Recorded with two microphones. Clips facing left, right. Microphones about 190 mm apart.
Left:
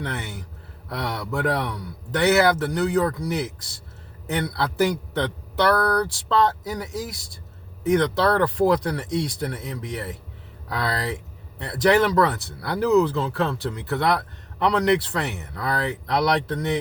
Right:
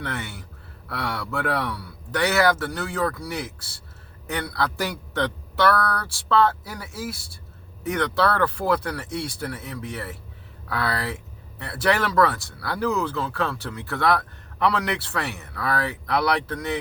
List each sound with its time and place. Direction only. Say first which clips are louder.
0.0 s a man's voice: left 1 dB; 15° left (ahead or behind)